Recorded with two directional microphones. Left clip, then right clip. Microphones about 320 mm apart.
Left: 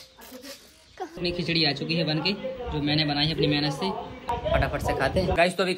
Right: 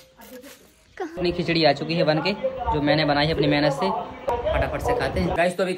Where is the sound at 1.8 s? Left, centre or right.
Centre.